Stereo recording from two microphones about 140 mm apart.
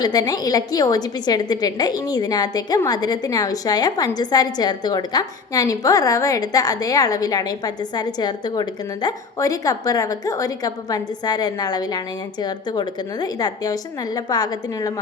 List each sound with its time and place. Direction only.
0.0 s a woman's voice: 30° left (ahead or behind)